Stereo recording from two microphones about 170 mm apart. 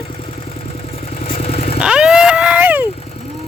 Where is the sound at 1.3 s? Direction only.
35° left (ahead or behind).